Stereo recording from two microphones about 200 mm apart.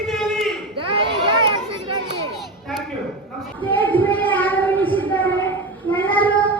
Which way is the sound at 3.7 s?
10° left (ahead or behind).